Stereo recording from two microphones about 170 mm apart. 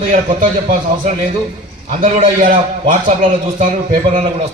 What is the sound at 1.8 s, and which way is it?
A man's voice, 50° right (ahead or behind).